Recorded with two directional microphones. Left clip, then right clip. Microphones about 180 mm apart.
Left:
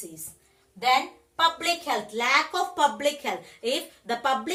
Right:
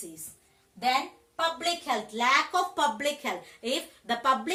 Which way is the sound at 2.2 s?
20° right (ahead or behind).